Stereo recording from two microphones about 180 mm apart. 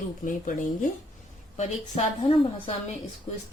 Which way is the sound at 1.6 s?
35° left (ahead or behind).